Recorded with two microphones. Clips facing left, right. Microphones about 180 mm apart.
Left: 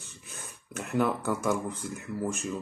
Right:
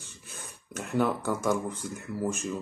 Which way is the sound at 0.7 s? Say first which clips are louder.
Even; centre (ahead or behind).